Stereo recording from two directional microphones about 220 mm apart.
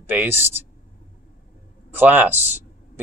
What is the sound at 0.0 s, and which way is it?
Speech, 10° right (ahead or behind).